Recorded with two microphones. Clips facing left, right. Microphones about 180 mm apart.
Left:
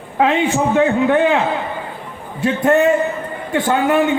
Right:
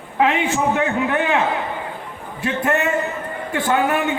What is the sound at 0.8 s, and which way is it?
Speech, 30° left (ahead or behind).